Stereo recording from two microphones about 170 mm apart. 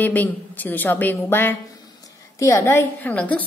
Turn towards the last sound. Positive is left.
turn(degrees=10)  # may be behind; listen again after turning